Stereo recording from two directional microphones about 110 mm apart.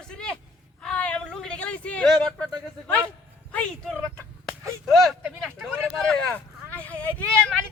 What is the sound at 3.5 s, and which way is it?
Speech, 10° left (ahead or behind).